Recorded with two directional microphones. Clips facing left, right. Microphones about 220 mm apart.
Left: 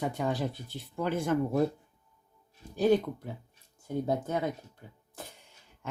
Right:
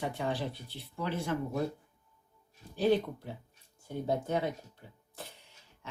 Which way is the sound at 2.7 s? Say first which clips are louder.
Left 3 dB; 45° left (ahead or behind).